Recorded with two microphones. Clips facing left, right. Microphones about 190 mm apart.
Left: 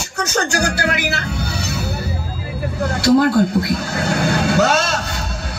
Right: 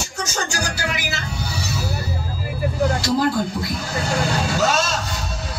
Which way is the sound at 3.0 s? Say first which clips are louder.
Left 7 dB; 60° left (ahead or behind).